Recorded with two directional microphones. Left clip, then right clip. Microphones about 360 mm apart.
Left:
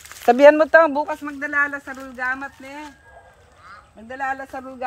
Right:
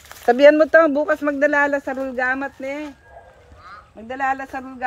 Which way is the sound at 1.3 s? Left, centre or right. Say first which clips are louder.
Right 5 dB; right.